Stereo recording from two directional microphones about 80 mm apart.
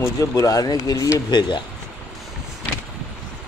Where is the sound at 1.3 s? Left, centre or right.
Left.